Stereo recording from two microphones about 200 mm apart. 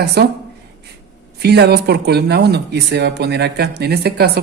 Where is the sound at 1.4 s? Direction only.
55° right (ahead or behind).